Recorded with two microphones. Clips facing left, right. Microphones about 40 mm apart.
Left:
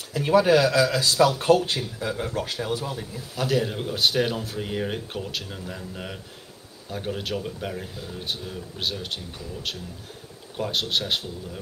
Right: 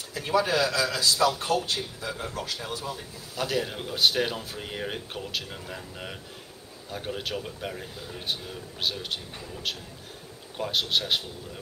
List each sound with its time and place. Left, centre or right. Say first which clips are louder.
0.1 s speech: left 7 dB; left
3.3 s speech: left 4 dB; centre